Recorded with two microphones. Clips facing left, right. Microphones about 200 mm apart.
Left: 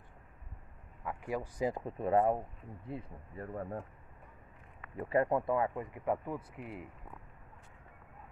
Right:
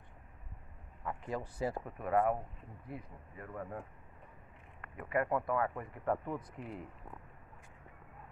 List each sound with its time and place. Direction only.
1.0 s speech: 10° left (ahead or behind); by 3.8 s 30° left (ahead or behind)
4.9 s speech: 30° left (ahead or behind)
6.2 s speech: 5° left (ahead or behind)